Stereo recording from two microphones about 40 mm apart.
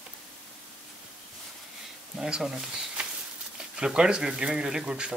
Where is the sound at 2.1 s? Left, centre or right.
Centre.